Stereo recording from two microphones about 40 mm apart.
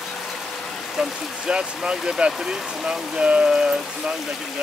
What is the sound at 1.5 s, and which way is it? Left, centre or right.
Speech, right.